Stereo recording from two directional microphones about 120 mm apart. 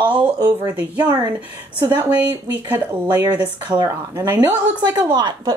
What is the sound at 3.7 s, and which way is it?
Speech, 30° right (ahead or behind).